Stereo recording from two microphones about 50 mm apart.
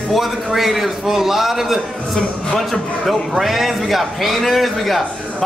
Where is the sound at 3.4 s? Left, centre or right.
Centre.